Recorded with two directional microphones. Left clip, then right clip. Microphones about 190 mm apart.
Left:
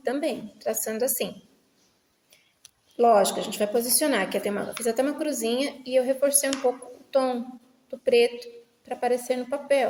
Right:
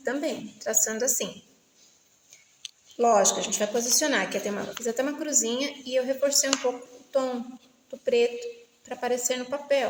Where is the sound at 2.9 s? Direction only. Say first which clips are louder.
Left 2 dB; 25° left (ahead or behind).